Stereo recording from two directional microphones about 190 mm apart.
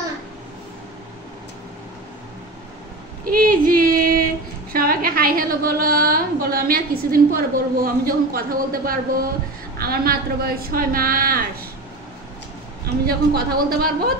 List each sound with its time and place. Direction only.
3.3 s female singing: 50° right (ahead or behind)
4.7 s a woman's voice: 50° right (ahead or behind)
13.0 s a woman's voice: 55° right (ahead or behind)